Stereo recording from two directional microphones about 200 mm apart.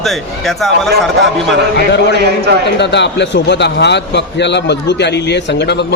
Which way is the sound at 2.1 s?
55° right (ahead or behind).